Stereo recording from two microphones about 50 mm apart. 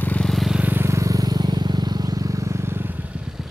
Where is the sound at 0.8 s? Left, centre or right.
Right.